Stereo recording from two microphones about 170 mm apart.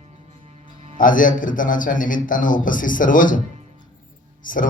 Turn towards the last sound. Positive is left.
turn(degrees=50)  # may be behind; listen again after turning